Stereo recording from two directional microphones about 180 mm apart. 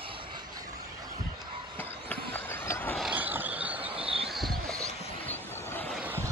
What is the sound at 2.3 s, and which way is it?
Vehicle, 10° left (ahead or behind).